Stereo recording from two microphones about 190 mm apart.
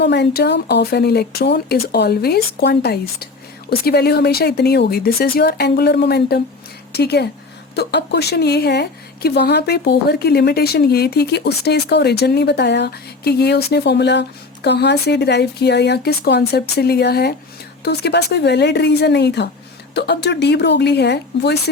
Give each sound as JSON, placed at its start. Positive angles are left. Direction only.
{"t": 0.0, "sound": "speech", "side_deg": 60}